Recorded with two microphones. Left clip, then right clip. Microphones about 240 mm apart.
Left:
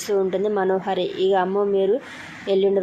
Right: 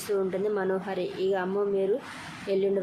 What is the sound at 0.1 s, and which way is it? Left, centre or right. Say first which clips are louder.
Speech: left 6 dB; centre.